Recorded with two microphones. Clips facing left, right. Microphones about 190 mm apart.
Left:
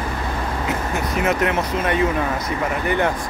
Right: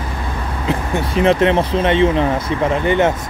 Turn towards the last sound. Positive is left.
turn(degrees=-25)  # may be behind; listen again after turning